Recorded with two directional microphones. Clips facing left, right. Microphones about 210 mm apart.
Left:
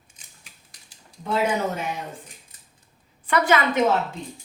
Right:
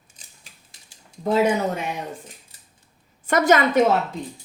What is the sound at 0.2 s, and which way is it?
Scissors, 35° right (ahead or behind).